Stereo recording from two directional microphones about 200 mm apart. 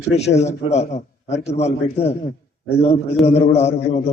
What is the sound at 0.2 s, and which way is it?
A man's voice, 35° left (ahead or behind).